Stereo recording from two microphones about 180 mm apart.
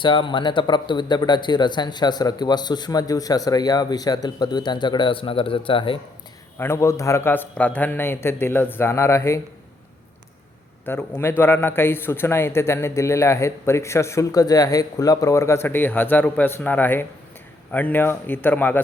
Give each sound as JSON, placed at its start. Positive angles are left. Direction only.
{"t": 0.0, "sound": "speech", "side_deg": 25}
{"t": 6.6, "sound": "a man's voice", "side_deg": 15}
{"t": 10.8, "sound": "a man's voice", "side_deg": 10}